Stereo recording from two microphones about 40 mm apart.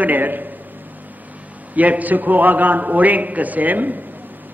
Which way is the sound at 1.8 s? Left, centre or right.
Right.